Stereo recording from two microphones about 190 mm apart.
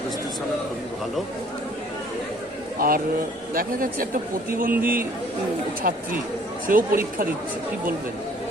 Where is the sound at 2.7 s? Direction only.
50° right (ahead or behind).